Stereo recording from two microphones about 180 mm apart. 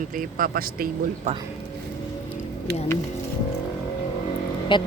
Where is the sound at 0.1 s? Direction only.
50° right (ahead or behind).